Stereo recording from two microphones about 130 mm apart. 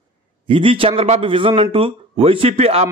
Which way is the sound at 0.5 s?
45° right (ahead or behind).